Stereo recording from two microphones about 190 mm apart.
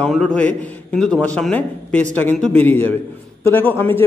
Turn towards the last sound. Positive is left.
turn(degrees=10)  # may be behind; listen again after turning